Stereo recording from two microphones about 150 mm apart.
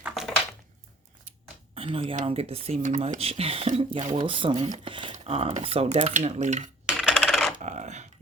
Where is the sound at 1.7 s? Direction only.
40° right (ahead or behind).